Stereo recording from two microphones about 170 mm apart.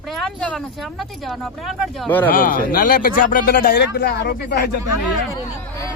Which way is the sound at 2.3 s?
55° left (ahead or behind).